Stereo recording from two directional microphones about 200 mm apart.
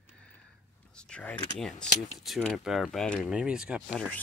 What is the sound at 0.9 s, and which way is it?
Power windows, 5° left (ahead or behind).